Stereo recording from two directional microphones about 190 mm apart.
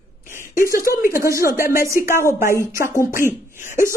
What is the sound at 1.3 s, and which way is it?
A woman's voice, 15° right (ahead or behind).